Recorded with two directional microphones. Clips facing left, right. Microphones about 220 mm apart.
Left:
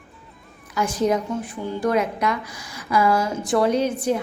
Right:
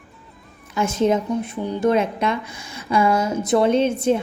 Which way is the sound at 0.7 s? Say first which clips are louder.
Right 2 dB; 25° right (ahead or behind).